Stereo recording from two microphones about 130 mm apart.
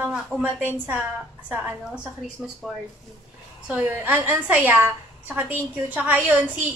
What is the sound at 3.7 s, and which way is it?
A woman's voice, 10° right (ahead or behind).